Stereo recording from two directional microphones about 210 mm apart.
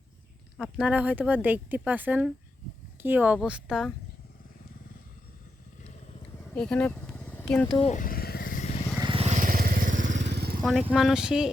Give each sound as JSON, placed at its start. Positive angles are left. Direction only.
{"t": 0.5, "sound": "speech", "side_deg": 0}
{"t": 6.5, "sound": "vehicle", "side_deg": 5}
{"t": 7.8, "sound": "vehicle", "side_deg": 35}
{"t": 9.0, "sound": "vehicle", "side_deg": -25}
{"t": 10.2, "sound": "motorcycle", "side_deg": -55}
{"t": 10.6, "sound": "speech", "side_deg": 0}